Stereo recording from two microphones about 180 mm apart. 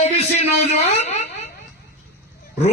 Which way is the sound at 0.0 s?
35° left (ahead or behind).